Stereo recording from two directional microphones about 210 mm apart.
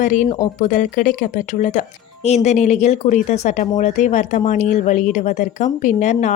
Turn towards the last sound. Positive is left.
turn(degrees=35)  # may be behind; listen again after turning